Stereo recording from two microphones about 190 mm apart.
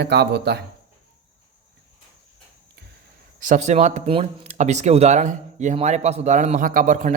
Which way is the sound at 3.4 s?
40° right (ahead or behind).